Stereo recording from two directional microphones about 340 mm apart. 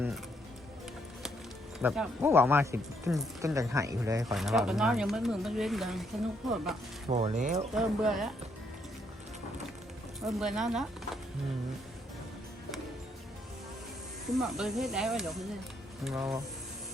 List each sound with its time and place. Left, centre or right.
1.8 s speech: centre
7.1 s speech: right
7.8 s speech: centre
10.2 s speech: centre
14.3 s speech: centre